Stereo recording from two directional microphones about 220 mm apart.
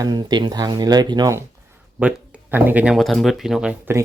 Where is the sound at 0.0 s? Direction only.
20° right (ahead or behind).